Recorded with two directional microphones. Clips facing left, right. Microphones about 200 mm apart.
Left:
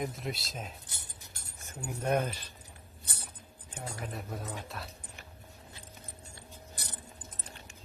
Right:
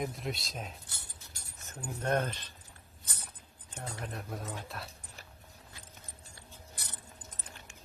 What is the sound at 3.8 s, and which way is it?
Speech, centre (ahead or behind).